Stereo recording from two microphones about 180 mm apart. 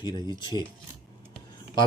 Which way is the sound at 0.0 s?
25° left (ahead or behind).